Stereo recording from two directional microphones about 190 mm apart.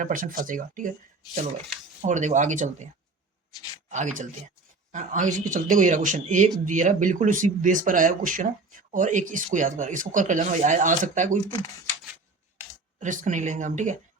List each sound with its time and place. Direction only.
0.0 s speech: 45° right (ahead or behind)
2.0 s a man's voice: 40° right (ahead or behind)
3.8 s a man's voice: 40° right (ahead or behind)
13.0 s a man's voice: 40° right (ahead or behind)